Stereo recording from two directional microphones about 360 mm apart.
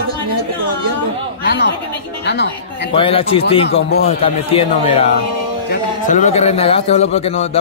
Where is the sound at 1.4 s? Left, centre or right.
Left.